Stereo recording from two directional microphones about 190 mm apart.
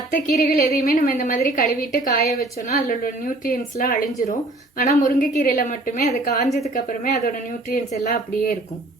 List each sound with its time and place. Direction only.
0.1 s a woman's voice: 45° left (ahead or behind)